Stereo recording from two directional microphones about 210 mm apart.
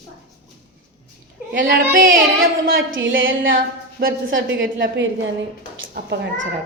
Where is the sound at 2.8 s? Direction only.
65° right (ahead or behind).